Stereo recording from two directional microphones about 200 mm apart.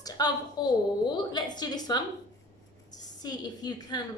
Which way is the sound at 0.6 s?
20° left (ahead or behind).